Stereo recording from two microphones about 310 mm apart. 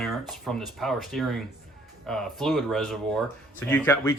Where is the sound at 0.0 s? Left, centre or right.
Centre.